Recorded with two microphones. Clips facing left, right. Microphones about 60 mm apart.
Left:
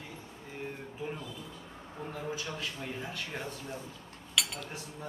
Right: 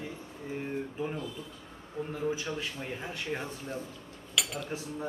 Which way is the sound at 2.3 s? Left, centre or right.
Centre.